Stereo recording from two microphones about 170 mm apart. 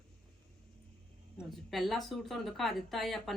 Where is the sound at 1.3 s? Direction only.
Centre (ahead or behind).